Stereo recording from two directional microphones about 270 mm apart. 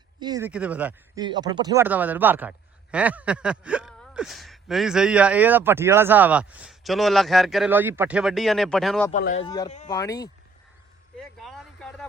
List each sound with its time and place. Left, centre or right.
0.2 s speech: centre
9.1 s speech: left
9.9 s speech: centre
11.2 s a sound: centre